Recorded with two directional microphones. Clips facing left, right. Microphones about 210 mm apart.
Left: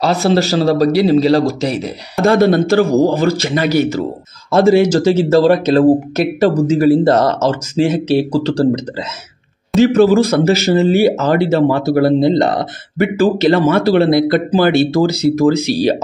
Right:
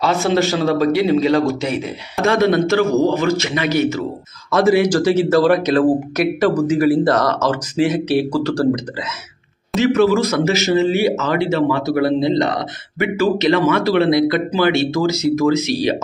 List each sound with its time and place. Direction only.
0.0 s speech: 35° left (ahead or behind)